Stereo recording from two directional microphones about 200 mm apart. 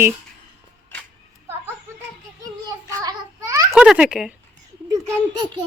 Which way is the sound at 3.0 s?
20° right (ahead or behind).